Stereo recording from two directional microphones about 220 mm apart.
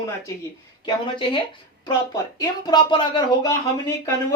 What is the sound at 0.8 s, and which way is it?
Speech, 25° left (ahead or behind).